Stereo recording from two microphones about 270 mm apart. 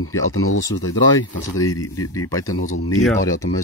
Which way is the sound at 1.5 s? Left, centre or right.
Centre.